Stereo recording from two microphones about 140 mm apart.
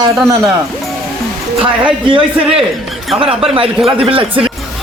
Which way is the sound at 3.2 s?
40° right (ahead or behind).